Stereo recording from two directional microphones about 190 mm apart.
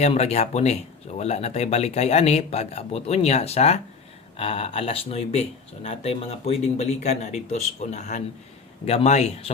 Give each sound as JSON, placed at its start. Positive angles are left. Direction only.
{"t": 0.0, "sound": "speech", "side_deg": 35}